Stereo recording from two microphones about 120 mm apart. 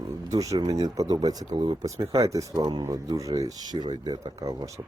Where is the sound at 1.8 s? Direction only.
25° right (ahead or behind).